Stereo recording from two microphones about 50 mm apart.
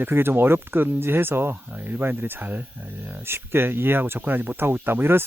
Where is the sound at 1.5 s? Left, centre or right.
Right.